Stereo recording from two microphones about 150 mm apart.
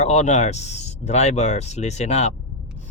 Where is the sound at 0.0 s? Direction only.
50° left (ahead or behind).